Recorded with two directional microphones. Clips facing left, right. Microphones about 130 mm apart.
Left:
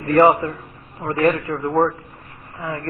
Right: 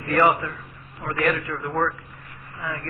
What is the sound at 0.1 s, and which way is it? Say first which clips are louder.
A man's voice: left 6 dB; 30° left (ahead or behind).